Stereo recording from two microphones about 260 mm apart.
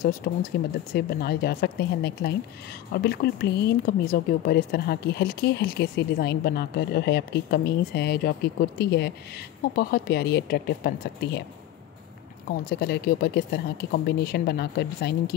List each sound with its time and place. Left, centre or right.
0.3 s speech: left
12.6 s speech: left